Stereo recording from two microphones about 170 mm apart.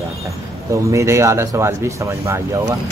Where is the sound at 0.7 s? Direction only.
15° right (ahead or behind).